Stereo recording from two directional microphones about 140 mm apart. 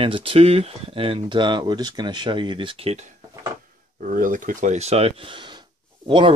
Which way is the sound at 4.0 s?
70° right (ahead or behind).